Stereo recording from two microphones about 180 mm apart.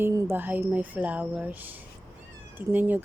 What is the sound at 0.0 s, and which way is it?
Speech, 15° right (ahead or behind).